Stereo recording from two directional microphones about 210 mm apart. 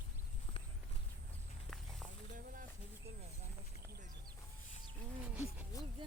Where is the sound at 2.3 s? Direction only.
40° right (ahead or behind).